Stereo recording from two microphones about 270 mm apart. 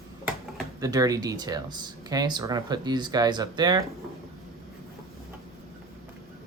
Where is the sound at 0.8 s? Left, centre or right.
Centre.